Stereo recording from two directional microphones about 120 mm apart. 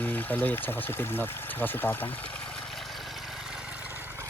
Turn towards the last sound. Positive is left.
turn(degrees=-20)  # may be behind; listen again after turning